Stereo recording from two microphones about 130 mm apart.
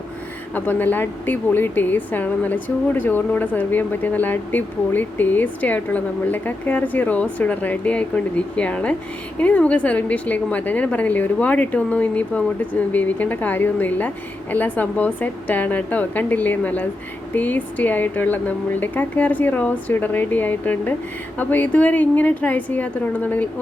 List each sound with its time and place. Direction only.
0.5 s speech: 15° left (ahead or behind)